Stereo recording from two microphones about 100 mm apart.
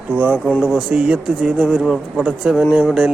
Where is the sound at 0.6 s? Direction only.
5° right (ahead or behind).